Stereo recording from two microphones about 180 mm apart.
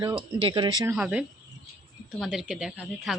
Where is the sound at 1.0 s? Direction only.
5° right (ahead or behind).